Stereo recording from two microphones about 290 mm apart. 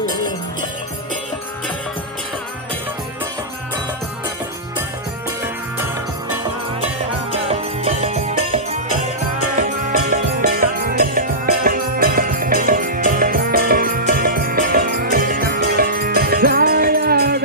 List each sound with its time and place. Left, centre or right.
7.4 s music: centre
9.6 s music: right